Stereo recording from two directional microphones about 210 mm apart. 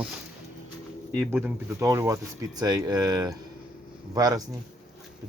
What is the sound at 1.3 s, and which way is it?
Speech, 10° right (ahead or behind).